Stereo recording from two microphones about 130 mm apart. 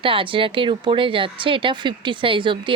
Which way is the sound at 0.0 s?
40° right (ahead or behind).